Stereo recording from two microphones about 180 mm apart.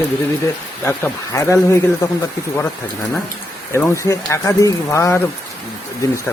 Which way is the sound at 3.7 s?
15° left (ahead or behind).